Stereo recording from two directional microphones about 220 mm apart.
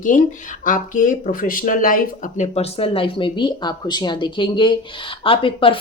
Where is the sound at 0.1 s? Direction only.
35° left (ahead or behind).